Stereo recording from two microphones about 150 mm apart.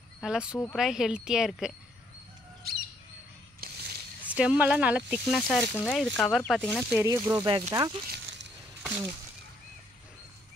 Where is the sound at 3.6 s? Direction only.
80° right.